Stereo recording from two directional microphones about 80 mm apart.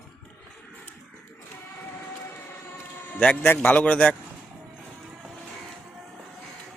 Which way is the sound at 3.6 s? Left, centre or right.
Centre.